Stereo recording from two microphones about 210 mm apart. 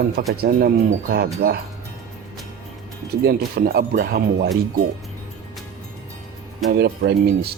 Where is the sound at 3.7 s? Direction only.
45° right (ahead or behind).